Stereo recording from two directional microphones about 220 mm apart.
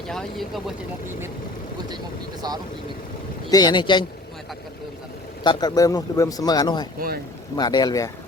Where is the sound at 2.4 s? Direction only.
20° right (ahead or behind).